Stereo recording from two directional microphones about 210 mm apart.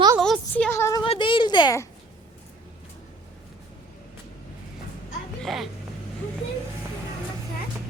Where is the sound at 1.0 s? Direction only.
25° left (ahead or behind).